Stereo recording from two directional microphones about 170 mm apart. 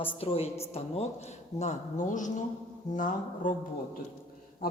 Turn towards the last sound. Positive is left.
turn(degrees=60)  # may be behind; listen again after turning